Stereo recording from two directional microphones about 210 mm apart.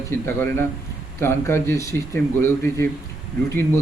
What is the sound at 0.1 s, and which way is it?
A man's voice, 10° left (ahead or behind).